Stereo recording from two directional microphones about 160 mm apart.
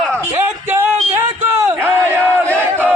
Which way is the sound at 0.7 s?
15° right (ahead or behind).